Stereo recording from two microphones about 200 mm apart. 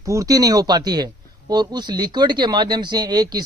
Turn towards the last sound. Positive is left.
turn(degrees=-20)  # may be behind; listen again after turning